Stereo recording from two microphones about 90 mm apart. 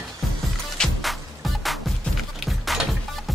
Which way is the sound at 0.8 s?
Centre (ahead or behind).